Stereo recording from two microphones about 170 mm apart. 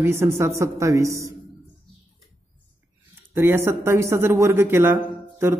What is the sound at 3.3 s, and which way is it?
Speech, 10° right (ahead or behind).